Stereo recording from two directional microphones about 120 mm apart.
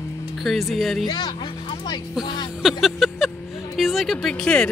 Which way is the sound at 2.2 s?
40° left (ahead or behind).